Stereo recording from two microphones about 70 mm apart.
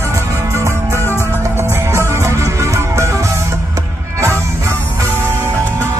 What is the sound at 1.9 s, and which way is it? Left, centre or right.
Music, right.